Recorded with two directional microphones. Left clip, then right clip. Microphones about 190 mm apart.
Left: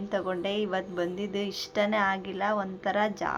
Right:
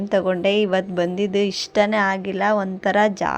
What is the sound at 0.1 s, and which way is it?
A woman's voice, 35° right (ahead or behind).